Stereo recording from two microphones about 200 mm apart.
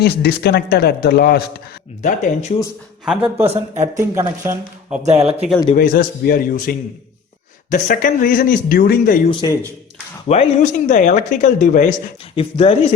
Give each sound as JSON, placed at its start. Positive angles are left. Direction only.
{"t": 0.0, "sound": "speech", "side_deg": 50}
{"t": 2.0, "sound": "speech", "side_deg": 35}
{"t": 3.1, "sound": "speech", "side_deg": -5}
{"t": 3.4, "sound": "speech", "side_deg": -30}
{"t": 3.9, "sound": "speech", "side_deg": -15}
{"t": 5.0, "sound": "speech", "side_deg": -30}
{"t": 5.7, "sound": "speech", "side_deg": 45}
{"t": 9.3, "sound": "speech", "side_deg": 20}
{"t": 10.2, "sound": "speech", "side_deg": 35}